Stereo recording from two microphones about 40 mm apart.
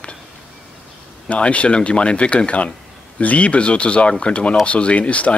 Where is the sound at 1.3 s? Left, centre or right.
Left.